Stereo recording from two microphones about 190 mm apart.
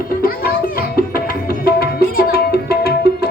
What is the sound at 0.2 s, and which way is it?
Music, 50° left (ahead or behind).